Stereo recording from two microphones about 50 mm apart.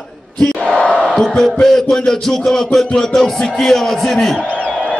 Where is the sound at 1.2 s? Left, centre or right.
Centre.